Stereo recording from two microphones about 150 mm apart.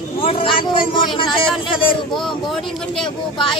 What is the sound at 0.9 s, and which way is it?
Speech, 30° left (ahead or behind).